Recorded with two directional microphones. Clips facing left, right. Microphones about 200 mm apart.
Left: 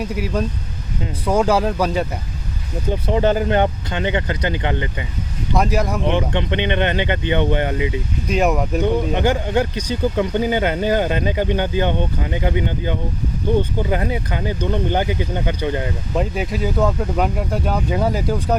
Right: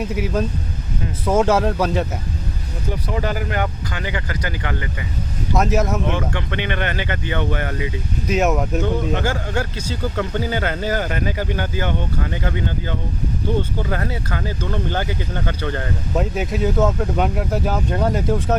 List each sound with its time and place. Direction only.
0.0 s speech: centre (ahead or behind)
2.9 s speech: 25° left (ahead or behind)
5.5 s speech: centre (ahead or behind)
6.1 s speech: 20° left (ahead or behind)
8.3 s speech: centre (ahead or behind)
9.1 s speech: 20° left (ahead or behind)
16.1 s speech: centre (ahead or behind)